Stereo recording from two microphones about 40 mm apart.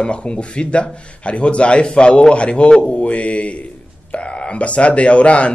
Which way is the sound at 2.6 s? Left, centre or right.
Centre.